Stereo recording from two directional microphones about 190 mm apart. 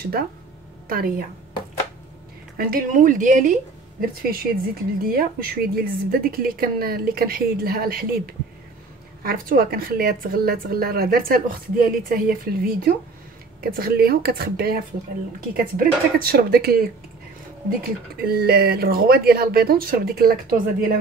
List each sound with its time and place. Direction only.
0.8 s a woman's voice: 50° right (ahead or behind)
2.5 s a woman's voice: 50° right (ahead or behind)